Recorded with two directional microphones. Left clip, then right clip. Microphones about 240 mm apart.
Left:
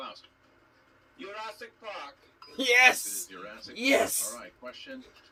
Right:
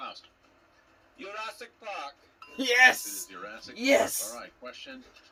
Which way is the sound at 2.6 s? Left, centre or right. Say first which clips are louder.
Even; centre.